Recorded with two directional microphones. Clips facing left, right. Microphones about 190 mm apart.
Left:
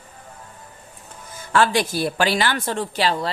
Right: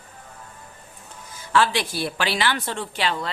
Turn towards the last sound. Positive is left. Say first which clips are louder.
# left 4 dB
turn(degrees=35)  # may be behind; listen again after turning